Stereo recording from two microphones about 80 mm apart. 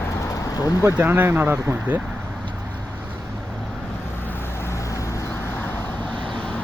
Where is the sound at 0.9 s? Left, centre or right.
Right.